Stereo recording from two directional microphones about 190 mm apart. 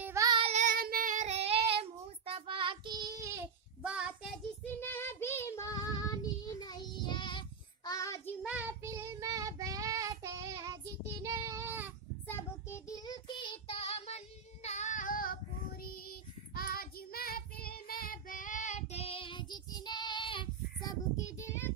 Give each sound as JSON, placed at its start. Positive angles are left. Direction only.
{"t": 0.0, "sound": "child singing", "side_deg": -15}
{"t": 3.8, "sound": "child singing", "side_deg": -5}
{"t": 4.6, "sound": "child singing", "side_deg": 10}
{"t": 8.4, "sound": "child singing", "side_deg": -5}
{"t": 12.3, "sound": "child singing", "side_deg": 15}
{"t": 21.3, "sound": "child singing", "side_deg": 15}